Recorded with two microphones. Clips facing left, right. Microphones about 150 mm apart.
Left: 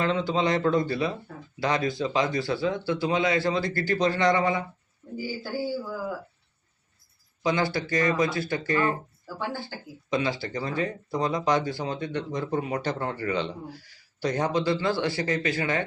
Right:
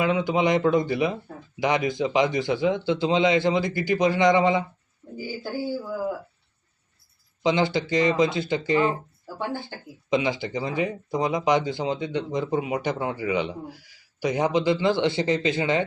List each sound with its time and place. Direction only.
0.0 s speech: 15° right (ahead or behind)
7.4 s speech: 20° right (ahead or behind)